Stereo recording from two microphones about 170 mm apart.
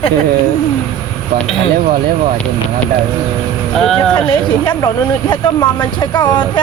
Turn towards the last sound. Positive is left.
turn(degrees=25)  # may be behind; listen again after turning